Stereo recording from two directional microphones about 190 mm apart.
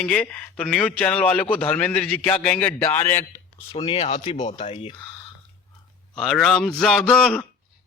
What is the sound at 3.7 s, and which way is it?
Speech, 30° left (ahead or behind).